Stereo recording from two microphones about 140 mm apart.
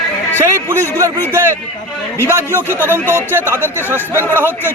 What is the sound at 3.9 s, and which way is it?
Speech, 15° right (ahead or behind).